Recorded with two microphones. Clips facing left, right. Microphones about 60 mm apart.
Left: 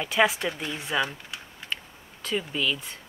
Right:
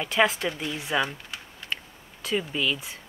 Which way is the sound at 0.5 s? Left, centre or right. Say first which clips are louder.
Right 1 dB; centre.